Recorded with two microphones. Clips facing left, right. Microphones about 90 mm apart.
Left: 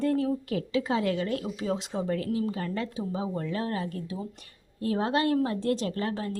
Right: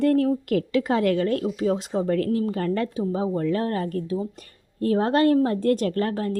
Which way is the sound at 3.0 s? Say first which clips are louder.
Right 7 dB; 45° right (ahead or behind).